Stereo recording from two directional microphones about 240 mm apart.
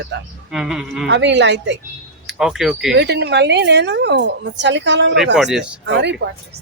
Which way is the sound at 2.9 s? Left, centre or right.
Right.